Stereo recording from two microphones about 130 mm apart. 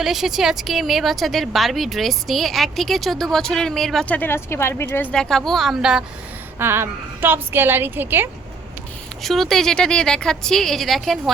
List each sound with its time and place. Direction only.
0.0 s a woman's voice: centre (ahead or behind)
4.2 s speech: 20° left (ahead or behind)
5.1 s a woman's voice: 5° left (ahead or behind)
6.6 s a woman's voice: 20° right (ahead or behind)
9.2 s a woman's voice: centre (ahead or behind)